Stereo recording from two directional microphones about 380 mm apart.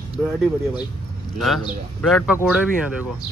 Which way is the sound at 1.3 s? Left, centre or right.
Centre.